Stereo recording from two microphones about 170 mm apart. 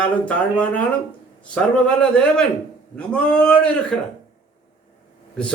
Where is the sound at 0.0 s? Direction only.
10° left (ahead or behind).